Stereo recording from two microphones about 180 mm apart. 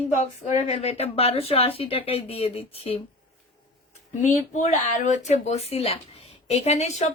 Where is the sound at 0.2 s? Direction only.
35° left (ahead or behind).